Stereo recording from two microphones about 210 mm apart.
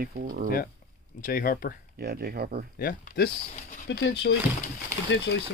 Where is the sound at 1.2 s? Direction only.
45° left (ahead or behind).